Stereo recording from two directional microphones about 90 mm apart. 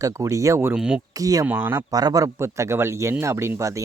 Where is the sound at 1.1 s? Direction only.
40° right (ahead or behind).